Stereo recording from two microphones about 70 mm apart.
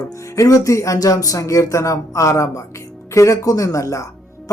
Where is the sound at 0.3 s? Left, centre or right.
Left.